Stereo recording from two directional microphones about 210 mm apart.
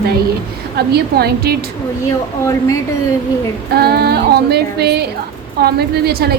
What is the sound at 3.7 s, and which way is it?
A woman's voice, 50° right (ahead or behind).